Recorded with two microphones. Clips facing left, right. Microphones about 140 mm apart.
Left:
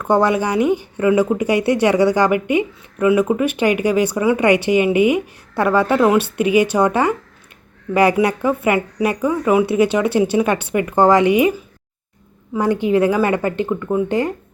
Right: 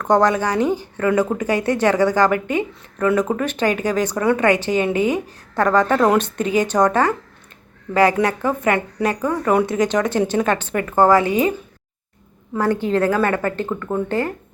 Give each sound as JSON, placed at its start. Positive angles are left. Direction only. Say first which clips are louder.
{"t": 0.0, "sound": "speech", "louder": "even", "side_deg": 10}